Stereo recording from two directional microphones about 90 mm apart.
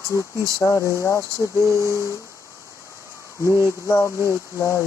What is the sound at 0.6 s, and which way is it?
Speech, 35° left (ahead or behind).